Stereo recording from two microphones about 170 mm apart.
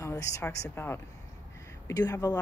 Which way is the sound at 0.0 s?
15° left (ahead or behind).